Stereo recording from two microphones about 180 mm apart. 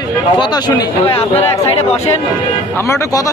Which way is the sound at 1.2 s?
35° left (ahead or behind).